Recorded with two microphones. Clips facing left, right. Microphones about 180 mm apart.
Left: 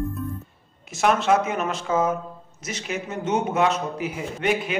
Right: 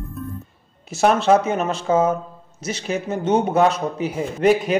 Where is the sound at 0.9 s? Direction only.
30° right (ahead or behind).